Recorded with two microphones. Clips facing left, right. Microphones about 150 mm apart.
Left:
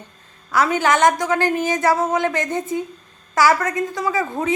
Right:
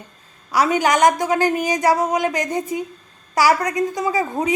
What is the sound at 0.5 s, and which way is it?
A woman's voice, 15° right (ahead or behind).